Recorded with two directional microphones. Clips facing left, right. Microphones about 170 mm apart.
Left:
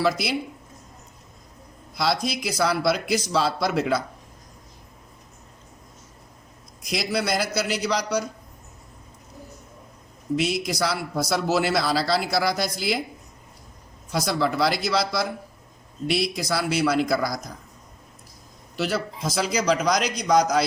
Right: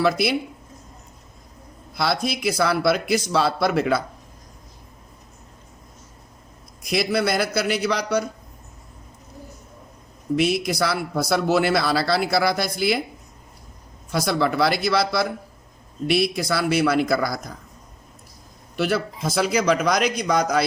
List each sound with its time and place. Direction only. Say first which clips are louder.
0.0 s a man's voice: right 3 dB; 60° right (ahead or behind)
2.0 s a man's voice: right 1 dB; 60° right (ahead or behind)
6.8 s a man's voice: right 4 dB; 60° right (ahead or behind)
10.3 s a man's voice: right 3 dB; 60° right (ahead or behind)
14.1 s a man's voice: right 2 dB; 60° right (ahead or behind)
18.8 s a man's voice: right 3 dB; 55° right (ahead or behind)